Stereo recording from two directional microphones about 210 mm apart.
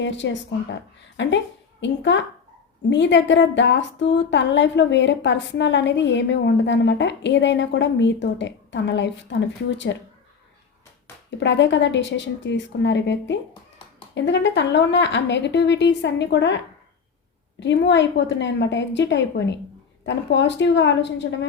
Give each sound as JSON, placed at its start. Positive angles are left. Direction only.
{"t": 0.0, "sound": "a woman's voice", "side_deg": 60}
{"t": 11.3, "sound": "a woman's voice", "side_deg": 55}
{"t": 17.6, "sound": "a woman's voice", "side_deg": 55}